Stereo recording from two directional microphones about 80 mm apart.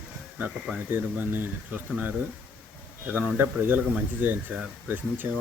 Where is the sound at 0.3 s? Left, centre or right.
Right.